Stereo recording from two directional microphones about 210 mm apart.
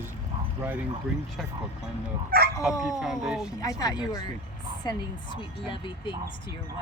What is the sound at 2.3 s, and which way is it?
Speech, 45° right (ahead or behind).